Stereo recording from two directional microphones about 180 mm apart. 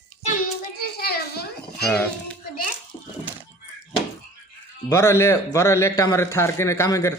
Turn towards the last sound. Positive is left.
turn(degrees=15)  # may be behind; listen again after turning